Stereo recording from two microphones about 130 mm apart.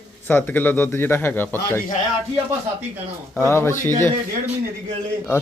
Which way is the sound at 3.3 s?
20° left (ahead or behind).